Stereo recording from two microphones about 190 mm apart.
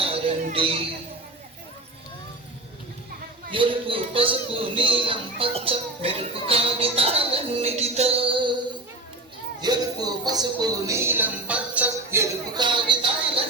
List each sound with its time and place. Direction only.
0.0 s a sound: 30° right (ahead or behind)
3.5 s a man's voice: 25° right (ahead or behind)
9.6 s a man's voice: 20° right (ahead or behind)